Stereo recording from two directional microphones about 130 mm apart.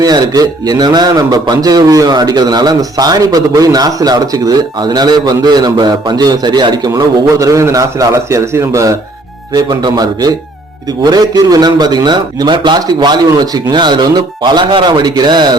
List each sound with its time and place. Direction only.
0.0 s a man's voice: 30° right (ahead or behind)